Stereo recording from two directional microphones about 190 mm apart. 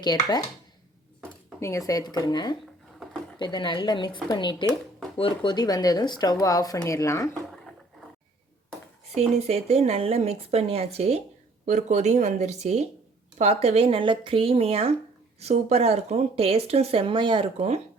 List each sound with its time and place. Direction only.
0.1 s speech: 20° left (ahead or behind)
1.2 s dishes: 15° left (ahead or behind)
1.9 s speech: 20° left (ahead or behind)
9.1 s speech: 35° right (ahead or behind)